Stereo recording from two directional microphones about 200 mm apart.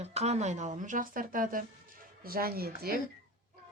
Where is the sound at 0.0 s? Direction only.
35° right (ahead or behind); by 2.9 s 50° right (ahead or behind).